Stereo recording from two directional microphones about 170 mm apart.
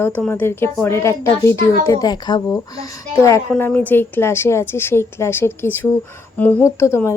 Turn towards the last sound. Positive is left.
turn(degrees=15)  # may be behind; listen again after turning